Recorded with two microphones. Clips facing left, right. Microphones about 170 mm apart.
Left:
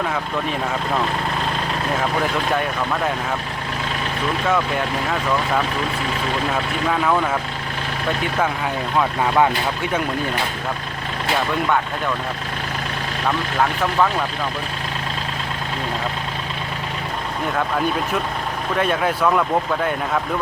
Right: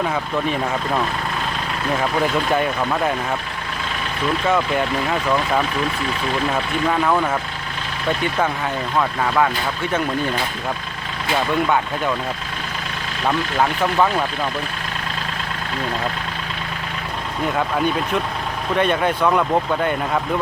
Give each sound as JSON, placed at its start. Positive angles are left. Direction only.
{"t": 9.0, "sound": "speech", "side_deg": 15}
{"t": 18.8, "sound": "speech", "side_deg": 0}